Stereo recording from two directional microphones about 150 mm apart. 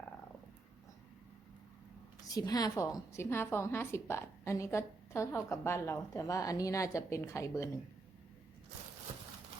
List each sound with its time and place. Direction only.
2.3 s a woman's voice: 25° left (ahead or behind)